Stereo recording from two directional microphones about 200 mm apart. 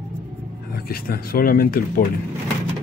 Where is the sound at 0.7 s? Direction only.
50° left (ahead or behind).